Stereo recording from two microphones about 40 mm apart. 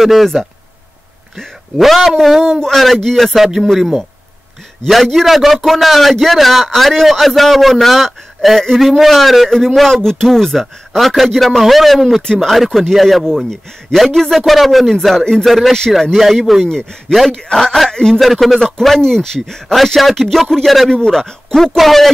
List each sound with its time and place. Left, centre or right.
0.0 s a man's voice: centre
1.8 s a man's voice: centre
3.3 s a man's voice: centre
5.0 s a man's voice: centre
17.3 s a man's voice: centre
18.2 s a man's voice: centre
18.6 s a man's voice: centre
20.9 s a man's voice: centre